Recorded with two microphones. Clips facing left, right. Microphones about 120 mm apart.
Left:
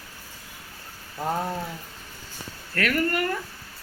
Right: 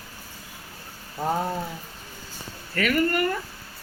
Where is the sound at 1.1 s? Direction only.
5° right (ahead or behind).